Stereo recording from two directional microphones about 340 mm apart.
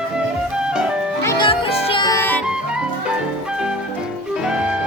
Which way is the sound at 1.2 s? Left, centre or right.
Centre.